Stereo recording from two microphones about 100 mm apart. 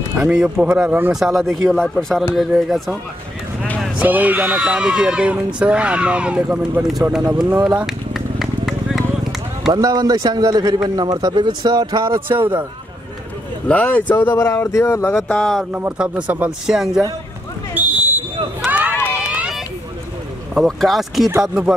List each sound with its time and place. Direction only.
0.2 s speech: 10° right (ahead or behind)
1.1 s speech: 5° right (ahead or behind)
4.0 s speech: 15° right (ahead or behind)
7.6 s run: 5° right (ahead or behind)
9.7 s a man's voice: 40° right (ahead or behind)
13.7 s speech: 15° left (ahead or behind)
15.2 s speech: 5° left (ahead or behind)
15.7 s speech: 15° right (ahead or behind)
17.7 s a sound: 20° right (ahead or behind)
18.7 s run: 15° right (ahead or behind)
20.5 s speech: centre (ahead or behind)